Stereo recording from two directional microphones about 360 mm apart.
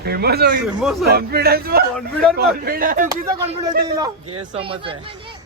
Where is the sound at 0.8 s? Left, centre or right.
Centre.